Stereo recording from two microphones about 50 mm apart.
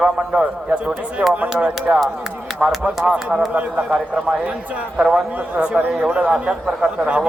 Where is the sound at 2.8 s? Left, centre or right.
Right.